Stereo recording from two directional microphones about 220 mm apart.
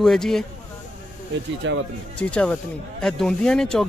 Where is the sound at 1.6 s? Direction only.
55° right (ahead or behind).